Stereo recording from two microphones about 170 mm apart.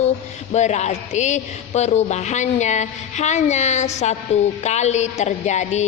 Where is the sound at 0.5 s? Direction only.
40° left (ahead or behind).